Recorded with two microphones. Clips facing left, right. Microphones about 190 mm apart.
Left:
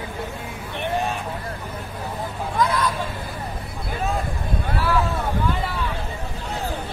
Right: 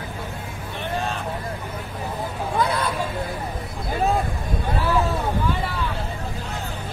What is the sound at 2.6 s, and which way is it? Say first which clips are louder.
Hubbub: left 3 dB; 30° right (ahead or behind).